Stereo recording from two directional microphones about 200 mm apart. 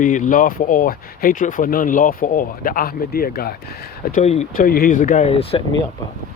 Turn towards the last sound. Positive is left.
turn(degrees=30)  # may be behind; listen again after turning